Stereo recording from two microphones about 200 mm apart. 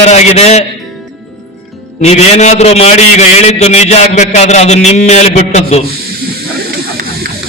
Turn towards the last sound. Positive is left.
turn(degrees=-50)  # may be behind; listen again after turning